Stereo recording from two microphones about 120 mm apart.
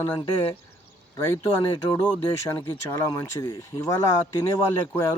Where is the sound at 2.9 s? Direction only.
30° left (ahead or behind).